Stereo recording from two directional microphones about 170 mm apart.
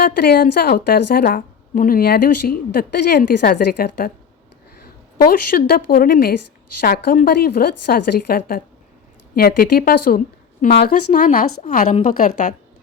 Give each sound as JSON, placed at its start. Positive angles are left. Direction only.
{"t": 0.2, "sound": "a woman's voice", "side_deg": 70}